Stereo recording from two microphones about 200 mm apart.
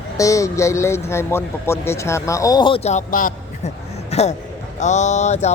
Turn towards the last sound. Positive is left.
turn(degrees=35)  # may be behind; listen again after turning